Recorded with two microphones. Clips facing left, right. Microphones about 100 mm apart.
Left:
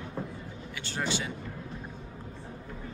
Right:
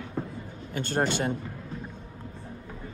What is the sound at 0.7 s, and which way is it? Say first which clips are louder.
Speech: right 6 dB; 50° right (ahead or behind).